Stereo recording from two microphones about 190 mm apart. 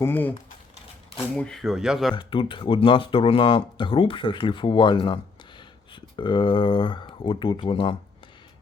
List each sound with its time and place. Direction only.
0.0 s speech: 10° left (ahead or behind)
1.4 s speech: 5° left (ahead or behind)
2.1 s speech: 25° left (ahead or behind)